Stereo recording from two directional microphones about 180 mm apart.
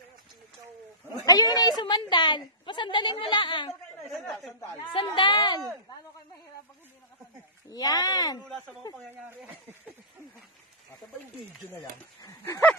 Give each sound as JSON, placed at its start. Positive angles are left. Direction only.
{"t": 1.2, "sound": "a woman's voice", "side_deg": 20}
{"t": 4.1, "sound": "speech", "side_deg": 5}
{"t": 4.9, "sound": "a woman's voice", "side_deg": 25}
{"t": 7.7, "sound": "a woman's voice", "side_deg": 20}
{"t": 9.1, "sound": "speech", "side_deg": -10}
{"t": 12.2, "sound": "a woman's voice", "side_deg": 20}